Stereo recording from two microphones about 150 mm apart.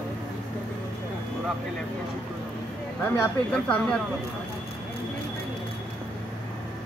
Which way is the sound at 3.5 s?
5° left (ahead or behind).